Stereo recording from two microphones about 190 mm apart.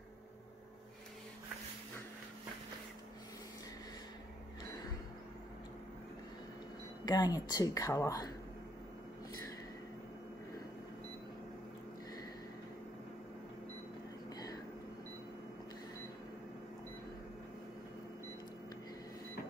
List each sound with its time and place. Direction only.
7.1 s a woman's voice: 20° left (ahead or behind)